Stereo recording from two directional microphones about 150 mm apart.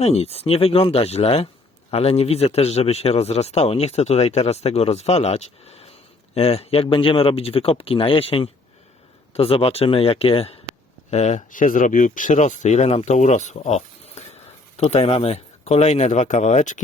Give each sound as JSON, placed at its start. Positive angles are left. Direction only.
{"t": 0.0, "sound": "speech", "side_deg": 45}
{"t": 11.1, "sound": "speech", "side_deg": 50}